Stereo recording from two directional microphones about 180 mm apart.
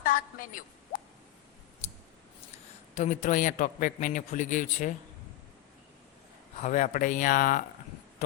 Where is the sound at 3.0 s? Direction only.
45° left (ahead or behind).